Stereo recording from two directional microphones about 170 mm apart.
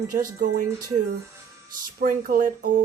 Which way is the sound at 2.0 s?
55° right (ahead or behind).